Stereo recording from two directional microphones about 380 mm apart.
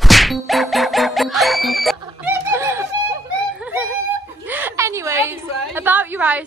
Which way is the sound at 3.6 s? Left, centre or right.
Centre.